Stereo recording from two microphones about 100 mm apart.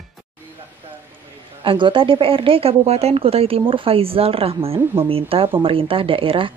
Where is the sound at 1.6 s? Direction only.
60° right (ahead or behind).